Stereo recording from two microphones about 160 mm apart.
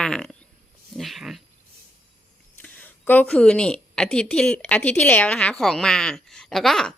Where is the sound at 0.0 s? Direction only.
5° left (ahead or behind).